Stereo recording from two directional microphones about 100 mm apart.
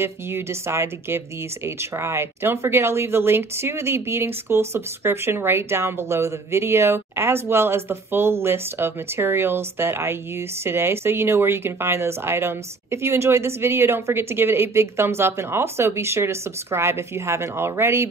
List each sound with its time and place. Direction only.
0.0 s speech: 25° right (ahead or behind)